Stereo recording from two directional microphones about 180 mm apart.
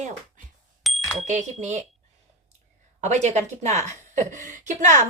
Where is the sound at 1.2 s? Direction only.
40° right (ahead or behind).